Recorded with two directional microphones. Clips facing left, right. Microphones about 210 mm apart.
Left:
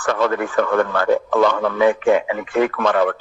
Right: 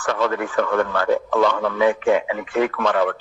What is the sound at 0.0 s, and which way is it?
Speech, 50° left (ahead or behind).